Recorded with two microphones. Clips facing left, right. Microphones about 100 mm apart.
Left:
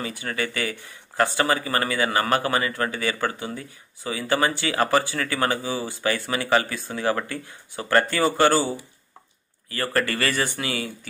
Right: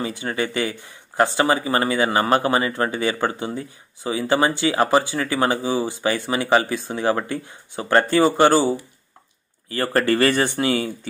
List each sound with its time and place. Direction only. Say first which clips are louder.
0.0 s speech: right 4 dB; 25° right (ahead or behind)